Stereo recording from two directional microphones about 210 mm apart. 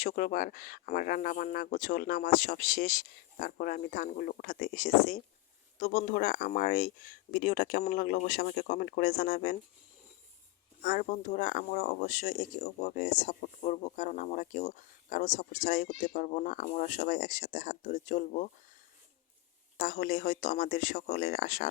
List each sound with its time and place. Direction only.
0.0 s speech: 40° left (ahead or behind)
10.8 s speech: 35° left (ahead or behind)
19.7 s speech: 40° left (ahead or behind)